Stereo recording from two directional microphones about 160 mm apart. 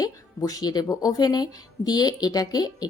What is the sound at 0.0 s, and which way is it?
Speech, 25° left (ahead or behind).